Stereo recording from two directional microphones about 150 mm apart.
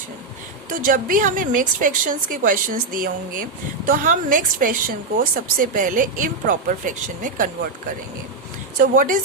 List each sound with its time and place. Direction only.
0.9 s a woman's voice: 70° right (ahead or behind)
8.8 s a woman's voice: 65° right (ahead or behind)